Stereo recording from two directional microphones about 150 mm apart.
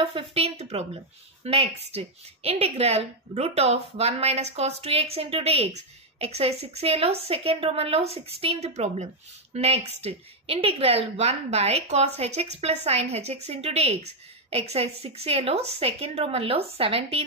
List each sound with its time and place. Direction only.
0.0 s a woman's voice: 40° right (ahead or behind)